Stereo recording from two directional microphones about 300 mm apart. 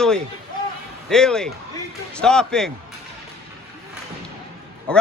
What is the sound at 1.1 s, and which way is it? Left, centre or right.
Speech, centre.